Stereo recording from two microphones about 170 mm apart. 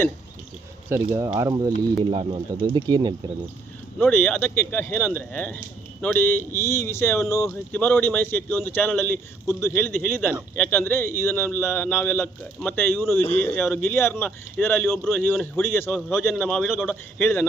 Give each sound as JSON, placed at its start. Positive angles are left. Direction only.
{"t": 0.9, "sound": "speech", "side_deg": -15}
{"t": 3.9, "sound": "speech", "side_deg": 10}
{"t": 13.3, "sound": "speech", "side_deg": 10}
{"t": 15.0, "sound": "a man's voice", "side_deg": 0}
{"t": 15.6, "sound": "speech", "side_deg": 15}
{"t": 16.4, "sound": "a man's voice", "side_deg": 0}